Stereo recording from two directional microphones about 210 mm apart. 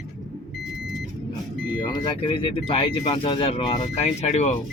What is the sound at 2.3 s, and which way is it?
Speech, 25° left (ahead or behind).